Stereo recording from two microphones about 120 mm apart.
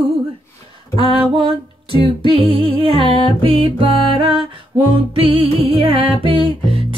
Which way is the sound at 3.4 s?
50° right (ahead or behind).